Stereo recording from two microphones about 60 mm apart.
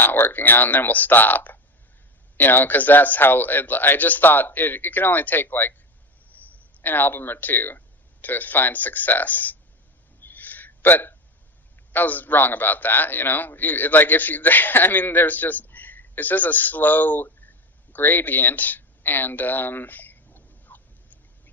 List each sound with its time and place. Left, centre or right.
0.0 s a man's voice: left
10.2 s hiccup: left
11.9 s a man's voice: left
17.9 s a sound: left